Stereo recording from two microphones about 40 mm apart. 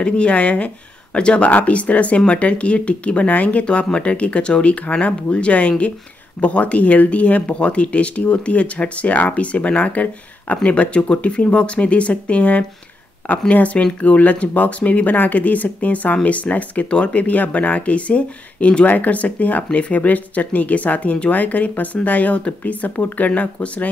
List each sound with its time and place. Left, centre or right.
0.0 s speech: left
1.5 s speech: left
18.9 s speech: left
22.8 s speech: left